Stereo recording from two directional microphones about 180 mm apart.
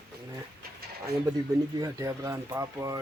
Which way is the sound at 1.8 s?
20° right (ahead or behind).